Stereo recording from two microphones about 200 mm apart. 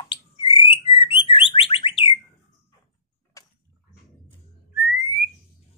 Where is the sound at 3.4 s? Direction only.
15° left (ahead or behind).